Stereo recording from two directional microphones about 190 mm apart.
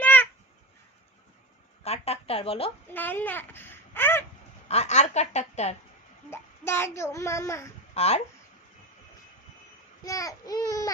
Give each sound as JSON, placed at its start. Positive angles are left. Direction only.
{"t": 0.0, "sound": "a sound", "side_deg": 10}
{"t": 1.8, "sound": "a woman's voice", "side_deg": 35}
{"t": 2.9, "sound": "a child's voice", "side_deg": 10}
{"t": 4.7, "sound": "a woman's voice", "side_deg": 35}
{"t": 6.3, "sound": "a child's voice", "side_deg": 15}
{"t": 7.9, "sound": "a woman's voice", "side_deg": 35}
{"t": 10.0, "sound": "speech", "side_deg": 20}